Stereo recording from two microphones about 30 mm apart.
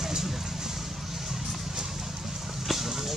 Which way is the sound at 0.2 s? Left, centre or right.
Centre.